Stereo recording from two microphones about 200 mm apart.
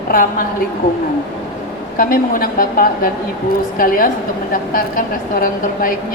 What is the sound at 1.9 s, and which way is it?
A woman's voice, 45° left (ahead or behind).